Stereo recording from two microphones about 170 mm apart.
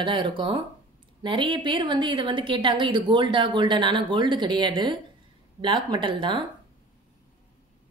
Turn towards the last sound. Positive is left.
turn(degrees=-30)  # may be behind; listen again after turning